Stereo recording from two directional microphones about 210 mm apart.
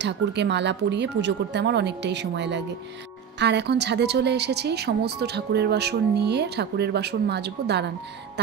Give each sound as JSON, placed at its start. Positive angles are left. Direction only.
{"t": 0.0, "sound": "a woman's voice", "side_deg": -55}